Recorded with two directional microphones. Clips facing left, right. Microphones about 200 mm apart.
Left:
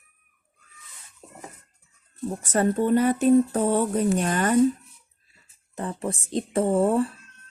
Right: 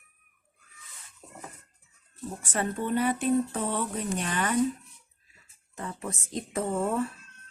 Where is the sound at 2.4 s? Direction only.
40° left (ahead or behind).